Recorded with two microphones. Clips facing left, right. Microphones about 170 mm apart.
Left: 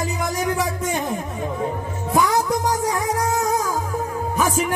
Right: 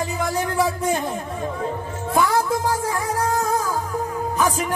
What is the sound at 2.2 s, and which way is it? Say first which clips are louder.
Music: even; 20° left (ahead or behind).